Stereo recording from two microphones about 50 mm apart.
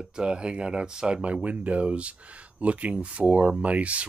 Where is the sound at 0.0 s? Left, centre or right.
Centre.